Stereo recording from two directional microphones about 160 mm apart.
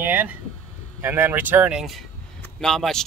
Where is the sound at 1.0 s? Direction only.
15° right (ahead or behind).